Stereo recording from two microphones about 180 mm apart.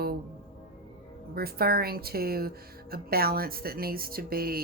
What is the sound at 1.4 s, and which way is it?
A woman's voice, 60° right (ahead or behind).